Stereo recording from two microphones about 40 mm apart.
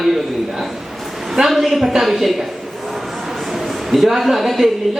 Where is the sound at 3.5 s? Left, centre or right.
Centre.